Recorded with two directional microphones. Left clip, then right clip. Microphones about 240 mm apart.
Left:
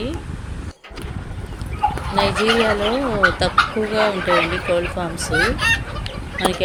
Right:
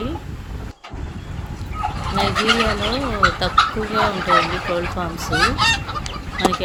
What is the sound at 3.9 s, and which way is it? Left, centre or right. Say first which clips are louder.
A woman's voice: right 1 dB; centre.